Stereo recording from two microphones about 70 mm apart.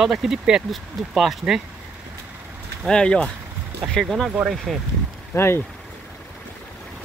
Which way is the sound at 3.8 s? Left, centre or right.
Centre.